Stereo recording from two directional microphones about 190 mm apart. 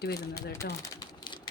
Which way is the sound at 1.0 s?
25° left (ahead or behind).